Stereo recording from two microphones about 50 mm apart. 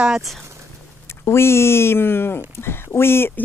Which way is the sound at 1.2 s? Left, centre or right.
Left.